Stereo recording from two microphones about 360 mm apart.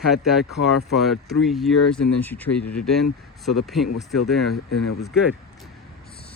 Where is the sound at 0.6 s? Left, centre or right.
Left.